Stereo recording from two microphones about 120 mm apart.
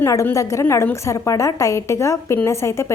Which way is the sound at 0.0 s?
25° left (ahead or behind).